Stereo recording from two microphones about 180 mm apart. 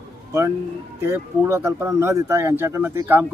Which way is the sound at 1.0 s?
15° right (ahead or behind).